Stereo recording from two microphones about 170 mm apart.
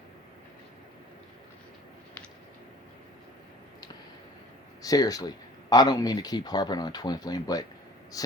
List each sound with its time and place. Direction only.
4.8 s speech: 20° left (ahead or behind)